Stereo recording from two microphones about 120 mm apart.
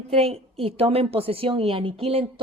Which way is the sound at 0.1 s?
55° right (ahead or behind).